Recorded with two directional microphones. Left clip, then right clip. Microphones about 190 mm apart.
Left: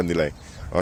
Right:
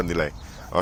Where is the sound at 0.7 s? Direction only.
35° left (ahead or behind).